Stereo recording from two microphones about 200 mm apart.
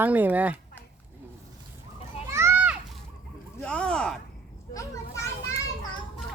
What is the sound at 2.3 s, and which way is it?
Children playing, 10° right (ahead or behind).